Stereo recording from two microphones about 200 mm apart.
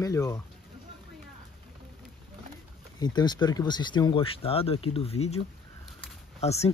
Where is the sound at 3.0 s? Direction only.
20° left (ahead or behind).